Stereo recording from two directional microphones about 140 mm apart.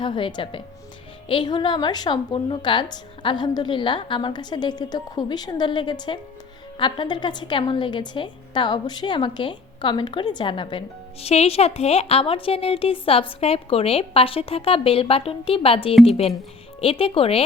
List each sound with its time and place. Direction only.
0.0 s a woman's voice: 35° left (ahead or behind)